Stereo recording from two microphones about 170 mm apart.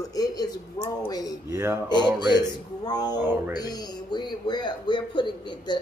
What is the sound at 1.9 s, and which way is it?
A man's voice, 25° left (ahead or behind).